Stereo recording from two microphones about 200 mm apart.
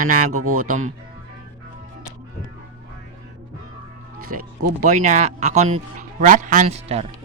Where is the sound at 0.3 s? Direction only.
90° right.